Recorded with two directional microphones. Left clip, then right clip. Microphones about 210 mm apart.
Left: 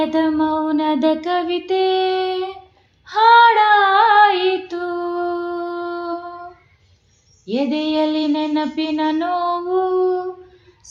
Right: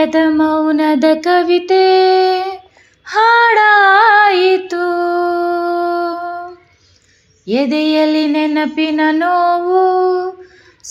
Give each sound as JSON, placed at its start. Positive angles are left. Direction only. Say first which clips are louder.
{"t": 0.0, "sound": "music", "louder": "right 6 dB", "side_deg": -30}
{"t": 3.0, "sound": "female singing", "louder": "right 1 dB", "side_deg": -35}
{"t": 7.4, "sound": "a sound", "louder": "right 6 dB", "side_deg": -35}